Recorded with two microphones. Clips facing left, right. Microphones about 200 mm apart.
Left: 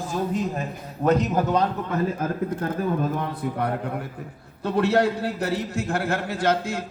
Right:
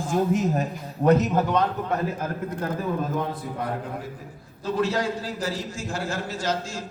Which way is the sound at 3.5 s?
65° left (ahead or behind).